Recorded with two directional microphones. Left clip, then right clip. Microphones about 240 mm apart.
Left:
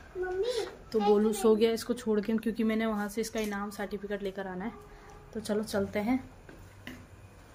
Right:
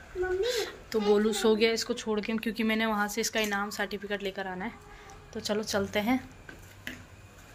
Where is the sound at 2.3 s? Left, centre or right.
Centre.